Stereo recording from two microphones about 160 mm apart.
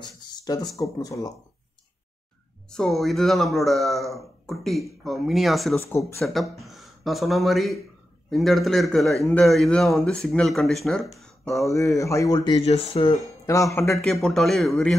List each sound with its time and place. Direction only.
0.0 s speech: 25° left (ahead or behind)
2.7 s speech: centre (ahead or behind)
5.8 s speech: 15° left (ahead or behind)
6.2 s speech: centre (ahead or behind)
11.6 s speech: 20° left (ahead or behind); by 13.2 s 35° left (ahead or behind)
13.5 s speech: 20° left (ahead or behind)
13.9 s speech: centre (ahead or behind)